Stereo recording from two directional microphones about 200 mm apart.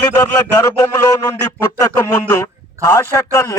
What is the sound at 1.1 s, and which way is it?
A man's voice, 15° left (ahead or behind).